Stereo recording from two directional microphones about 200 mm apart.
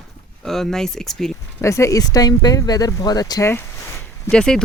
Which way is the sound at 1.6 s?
15° left (ahead or behind).